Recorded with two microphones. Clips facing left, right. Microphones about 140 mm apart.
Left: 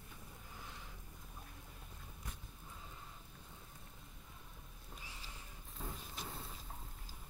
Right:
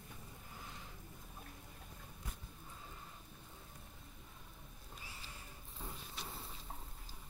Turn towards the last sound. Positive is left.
turn(degrees=0)  # may be behind; listen again after turning